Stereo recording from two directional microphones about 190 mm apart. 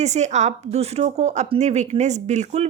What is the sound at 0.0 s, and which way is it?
A woman's voice, 35° right (ahead or behind).